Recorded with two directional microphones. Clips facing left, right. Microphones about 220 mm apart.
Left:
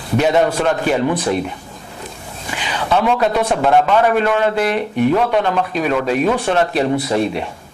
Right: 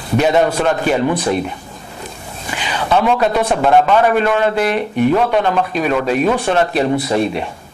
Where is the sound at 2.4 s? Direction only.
15° right (ahead or behind).